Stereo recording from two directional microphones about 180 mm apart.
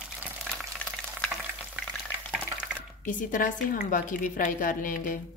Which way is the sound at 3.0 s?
50° left (ahead or behind).